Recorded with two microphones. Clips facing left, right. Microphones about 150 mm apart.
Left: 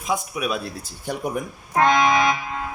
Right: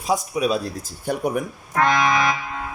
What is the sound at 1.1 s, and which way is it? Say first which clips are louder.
Speech: right 4 dB; 55° right (ahead or behind).